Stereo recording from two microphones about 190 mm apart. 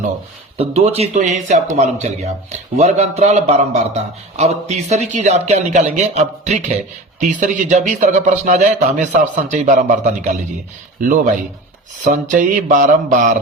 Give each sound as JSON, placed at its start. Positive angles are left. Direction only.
{"t": 0.5, "sound": "speech", "side_deg": -30}
{"t": 11.0, "sound": "mantra", "side_deg": -45}